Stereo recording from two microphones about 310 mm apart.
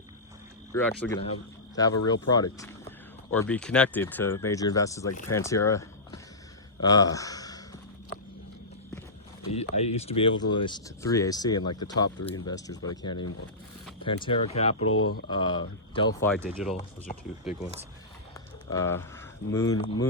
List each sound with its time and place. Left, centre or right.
0.7 s speech: centre
9.5 s speech: centre
14.8 s speech: left
15.3 s speech: centre
16.3 s speech: centre
18.7 s speech: centre